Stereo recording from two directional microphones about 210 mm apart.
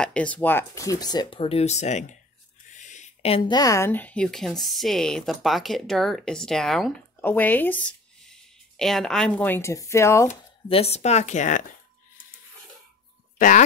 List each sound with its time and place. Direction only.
0.0 s speech: 5° left (ahead or behind)
10.2 s speech: 30° left (ahead or behind)
13.4 s speech: 40° left (ahead or behind)